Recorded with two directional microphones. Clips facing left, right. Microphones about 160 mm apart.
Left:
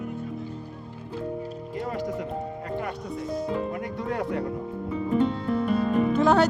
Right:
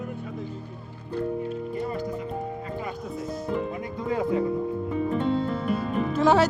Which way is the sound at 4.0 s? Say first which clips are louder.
Right 5 dB; 75° left (ahead or behind).